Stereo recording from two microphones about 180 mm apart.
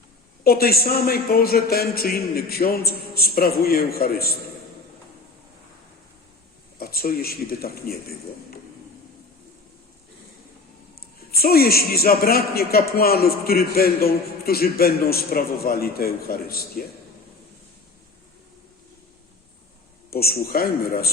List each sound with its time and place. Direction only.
0.4 s a man's voice: 55° left (ahead or behind)
6.7 s a man's voice: 55° left (ahead or behind)
11.3 s a man's voice: 55° left (ahead or behind)
20.1 s a man's voice: 60° left (ahead or behind)